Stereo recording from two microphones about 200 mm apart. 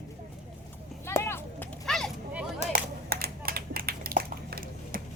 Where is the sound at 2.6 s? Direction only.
45° right (ahead or behind).